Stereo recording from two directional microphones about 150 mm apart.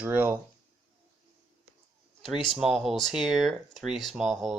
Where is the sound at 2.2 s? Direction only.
Centre (ahead or behind).